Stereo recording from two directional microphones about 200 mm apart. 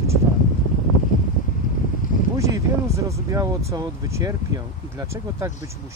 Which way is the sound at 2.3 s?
15° right (ahead or behind).